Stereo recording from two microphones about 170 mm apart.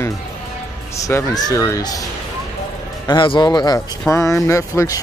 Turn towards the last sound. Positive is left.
turn(degrees=20)  # may be behind; listen again after turning